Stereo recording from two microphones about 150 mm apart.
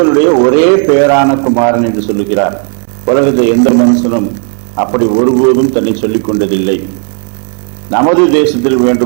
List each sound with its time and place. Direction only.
0.1 s a man's voice: 20° right (ahead or behind)
7.9 s a man's voice: 15° right (ahead or behind)